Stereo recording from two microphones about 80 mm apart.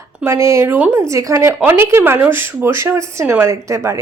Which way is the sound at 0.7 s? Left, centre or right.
Right.